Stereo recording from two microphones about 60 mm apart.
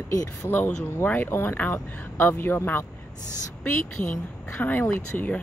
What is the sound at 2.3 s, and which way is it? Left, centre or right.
Speech, left.